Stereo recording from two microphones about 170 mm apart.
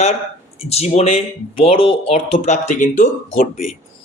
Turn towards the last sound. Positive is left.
turn(degrees=50)  # may be behind; listen again after turning